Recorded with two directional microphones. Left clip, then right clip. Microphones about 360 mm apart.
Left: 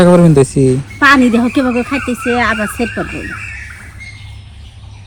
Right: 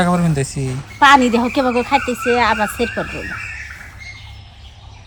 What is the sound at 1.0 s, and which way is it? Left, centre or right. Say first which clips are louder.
Speech: left 1 dB; centre.